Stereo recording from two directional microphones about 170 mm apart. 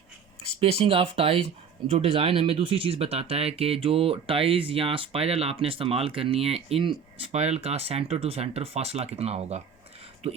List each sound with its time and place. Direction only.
0.6 s speech: 35° right (ahead or behind)